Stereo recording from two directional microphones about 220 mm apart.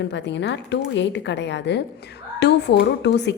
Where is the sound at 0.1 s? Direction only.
55° left (ahead or behind).